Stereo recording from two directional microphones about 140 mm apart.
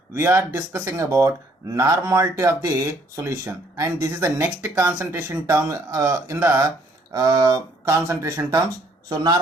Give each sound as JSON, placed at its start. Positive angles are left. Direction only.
{"t": 0.1, "sound": "speech", "side_deg": -20}